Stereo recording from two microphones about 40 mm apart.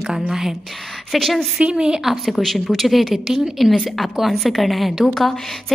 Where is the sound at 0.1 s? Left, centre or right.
Centre.